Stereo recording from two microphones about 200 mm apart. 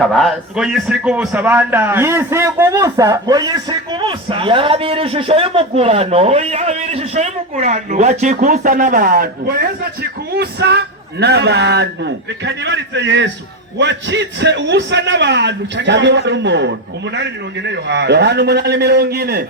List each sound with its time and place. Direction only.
0.0 s a man's voice: centre (ahead or behind); by 19.5 s 50° right (ahead or behind)